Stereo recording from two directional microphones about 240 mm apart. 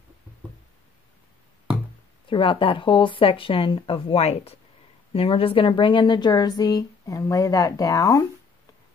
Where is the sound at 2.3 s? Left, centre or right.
Left.